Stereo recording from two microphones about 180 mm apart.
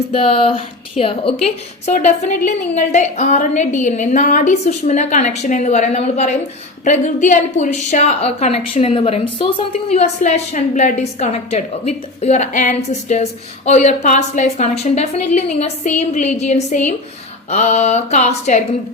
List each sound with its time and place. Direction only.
0.1 s a woman's voice: 30° left (ahead or behind)